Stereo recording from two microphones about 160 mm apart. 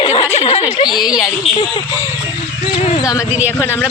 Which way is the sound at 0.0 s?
35° left (ahead or behind).